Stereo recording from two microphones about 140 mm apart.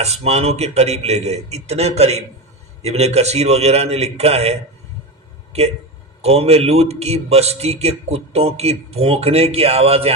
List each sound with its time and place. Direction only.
0.0 s a man's voice: 50° right (ahead or behind)
6.2 s a man's voice: 45° right (ahead or behind)